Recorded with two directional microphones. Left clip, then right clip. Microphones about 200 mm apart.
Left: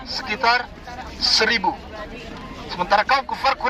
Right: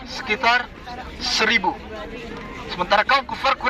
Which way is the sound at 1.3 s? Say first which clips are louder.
Even; 15° left (ahead or behind).